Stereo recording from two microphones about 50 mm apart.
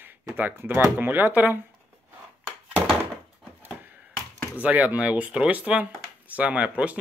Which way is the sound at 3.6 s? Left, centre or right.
Right.